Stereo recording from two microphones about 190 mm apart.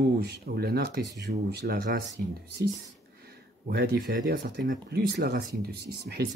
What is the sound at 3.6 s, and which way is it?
Speech, 55° right (ahead or behind).